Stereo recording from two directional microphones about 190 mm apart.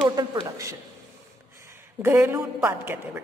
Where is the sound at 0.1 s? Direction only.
20° right (ahead or behind).